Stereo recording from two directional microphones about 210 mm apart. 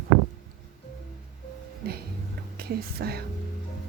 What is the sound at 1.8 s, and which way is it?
A woman's voice, 50° right (ahead or behind).